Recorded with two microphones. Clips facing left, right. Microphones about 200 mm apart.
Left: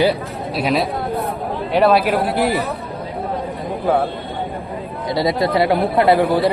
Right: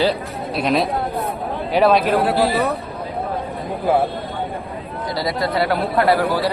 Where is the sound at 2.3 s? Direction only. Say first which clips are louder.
Even; 20° left (ahead or behind).